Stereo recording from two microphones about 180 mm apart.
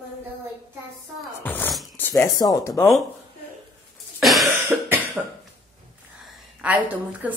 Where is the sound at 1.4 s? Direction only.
10° left (ahead or behind).